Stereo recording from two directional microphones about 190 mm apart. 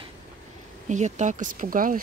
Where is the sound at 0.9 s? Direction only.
40° right (ahead or behind).